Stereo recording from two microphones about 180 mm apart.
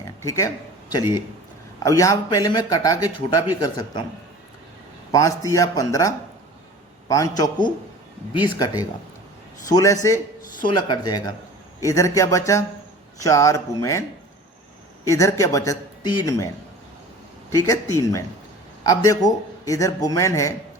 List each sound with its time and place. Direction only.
0.0 s a sound: 15° left (ahead or behind)
1.8 s speech: 20° left (ahead or behind)
5.1 s speech: 20° left (ahead or behind)
15.0 s speech: 15° left (ahead or behind)
18.8 s speech: 20° left (ahead or behind)